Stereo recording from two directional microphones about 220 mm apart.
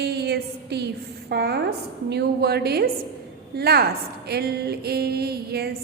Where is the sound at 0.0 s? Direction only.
50° right (ahead or behind).